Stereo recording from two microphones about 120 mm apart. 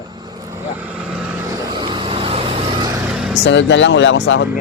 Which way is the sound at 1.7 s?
40° right (ahead or behind).